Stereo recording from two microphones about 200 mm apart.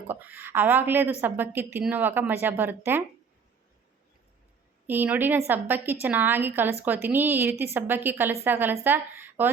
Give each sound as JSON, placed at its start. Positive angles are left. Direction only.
{"t": 0.1, "sound": "a woman's voice", "side_deg": -10}
{"t": 4.9, "sound": "a woman's voice", "side_deg": -10}